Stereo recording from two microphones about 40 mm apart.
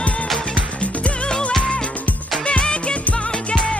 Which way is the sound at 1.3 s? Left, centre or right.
Left.